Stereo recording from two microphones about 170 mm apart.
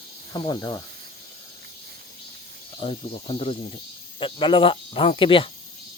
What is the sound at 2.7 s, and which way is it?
Speech, 35° left (ahead or behind).